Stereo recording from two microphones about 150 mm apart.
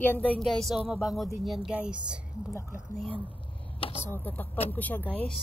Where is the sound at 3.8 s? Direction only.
40° left (ahead or behind).